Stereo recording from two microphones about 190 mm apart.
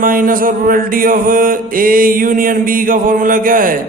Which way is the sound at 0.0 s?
45° right (ahead or behind).